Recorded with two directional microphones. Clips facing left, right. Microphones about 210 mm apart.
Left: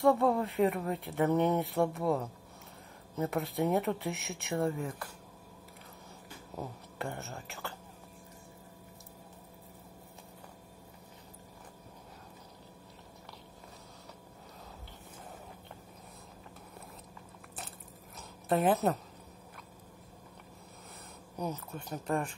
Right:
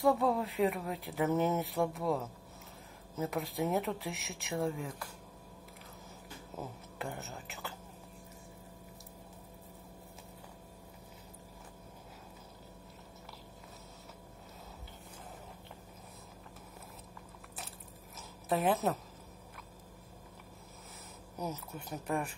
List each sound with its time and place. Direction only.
0.0 s speech: centre (ahead or behind)
6.6 s speech: centre (ahead or behind)
18.5 s speech: centre (ahead or behind)
21.7 s speech: 10° right (ahead or behind)